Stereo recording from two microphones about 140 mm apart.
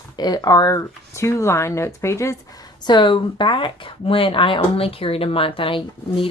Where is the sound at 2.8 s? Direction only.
35° left (ahead or behind).